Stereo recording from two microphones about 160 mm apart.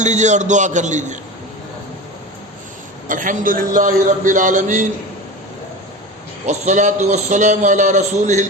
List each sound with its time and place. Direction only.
0.0 s a man's voice: 50° right (ahead or behind)
3.1 s a man's voice: 55° right (ahead or behind)
6.4 s a man's voice: 45° right (ahead or behind)